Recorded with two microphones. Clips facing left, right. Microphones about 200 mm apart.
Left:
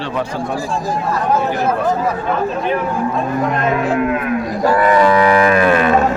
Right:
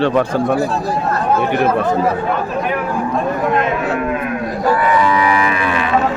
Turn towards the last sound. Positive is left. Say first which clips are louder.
# left 4 dB
turn(degrees=45)  # may be behind; listen again after turning